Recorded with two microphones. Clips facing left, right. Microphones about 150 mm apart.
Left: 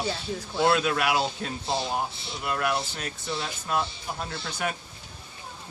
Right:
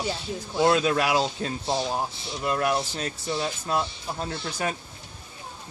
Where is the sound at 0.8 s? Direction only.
30° right (ahead or behind).